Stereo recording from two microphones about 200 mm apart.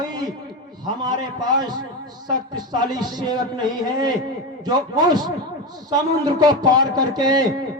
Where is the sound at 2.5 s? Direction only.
20° right (ahead or behind).